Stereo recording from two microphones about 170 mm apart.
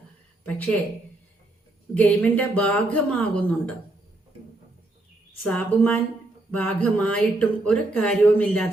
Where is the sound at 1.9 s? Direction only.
10° left (ahead or behind).